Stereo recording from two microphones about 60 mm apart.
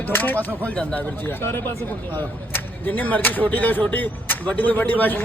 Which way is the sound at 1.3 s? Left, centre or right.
Left.